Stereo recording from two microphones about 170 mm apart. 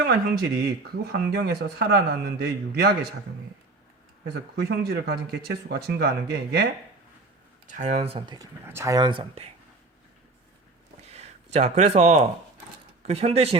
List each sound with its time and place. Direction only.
0.0 s a man's voice: 70° right (ahead or behind)
4.7 s a man's voice: 65° right (ahead or behind)
7.7 s speech: 45° right (ahead or behind)
8.4 s speech: 15° right (ahead or behind); by 9.5 s 30° right (ahead or behind)
11.1 s speech: 40° right (ahead or behind)